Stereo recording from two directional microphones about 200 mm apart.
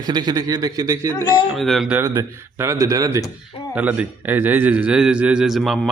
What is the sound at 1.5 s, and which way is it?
Speech, centre (ahead or behind).